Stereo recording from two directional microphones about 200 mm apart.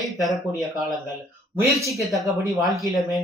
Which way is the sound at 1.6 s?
15° right (ahead or behind).